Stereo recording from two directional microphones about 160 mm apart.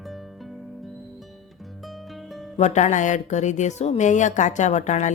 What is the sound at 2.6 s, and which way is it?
A woman's voice, 45° left (ahead or behind).